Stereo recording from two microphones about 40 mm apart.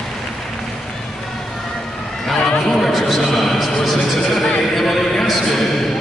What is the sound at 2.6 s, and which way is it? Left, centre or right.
Chatter, centre.